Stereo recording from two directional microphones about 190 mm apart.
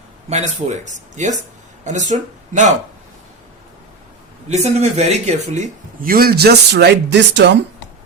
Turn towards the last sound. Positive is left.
turn(degrees=-65)  # may be behind; listen again after turning